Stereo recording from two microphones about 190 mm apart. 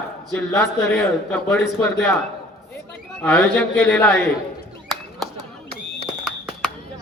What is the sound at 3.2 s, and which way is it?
A man's voice, 10° left (ahead or behind).